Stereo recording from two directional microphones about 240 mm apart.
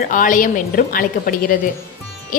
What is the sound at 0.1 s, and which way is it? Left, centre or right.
A woman's voice, left.